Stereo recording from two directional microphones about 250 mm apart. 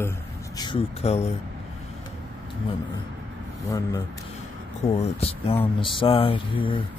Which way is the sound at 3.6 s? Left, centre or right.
Centre.